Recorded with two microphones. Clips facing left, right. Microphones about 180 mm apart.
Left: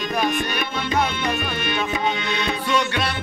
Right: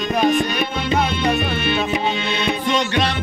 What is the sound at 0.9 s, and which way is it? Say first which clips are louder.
Music: right 3 dB; 25° right (ahead or behind).